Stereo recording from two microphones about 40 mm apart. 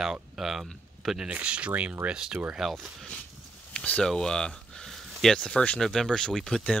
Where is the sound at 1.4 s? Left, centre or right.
Right.